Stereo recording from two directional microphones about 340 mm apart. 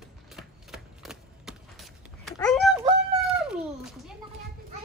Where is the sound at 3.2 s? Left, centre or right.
Centre.